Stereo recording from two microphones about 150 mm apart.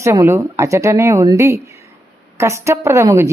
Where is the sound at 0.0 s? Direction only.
20° right (ahead or behind).